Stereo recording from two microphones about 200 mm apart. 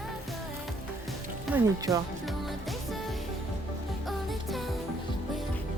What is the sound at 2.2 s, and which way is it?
Music, centre (ahead or behind).